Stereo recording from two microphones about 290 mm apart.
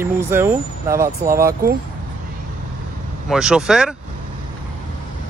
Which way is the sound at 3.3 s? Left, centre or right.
Centre.